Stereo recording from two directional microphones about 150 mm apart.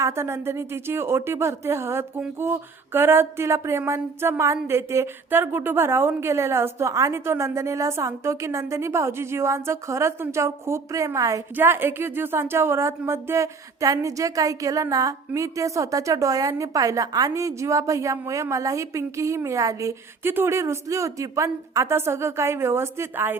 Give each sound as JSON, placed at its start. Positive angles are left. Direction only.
{"t": 0.0, "sound": "speech", "side_deg": -15}